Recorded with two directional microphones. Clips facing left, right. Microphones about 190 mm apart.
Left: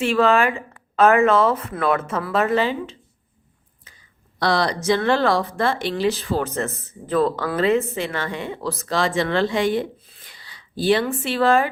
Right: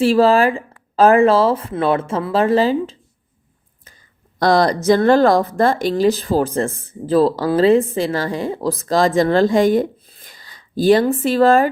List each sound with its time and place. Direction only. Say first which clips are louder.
0.0 s speech: right 5 dB; 35° right (ahead or behind)
4.4 s speech: right 6 dB; 45° right (ahead or behind)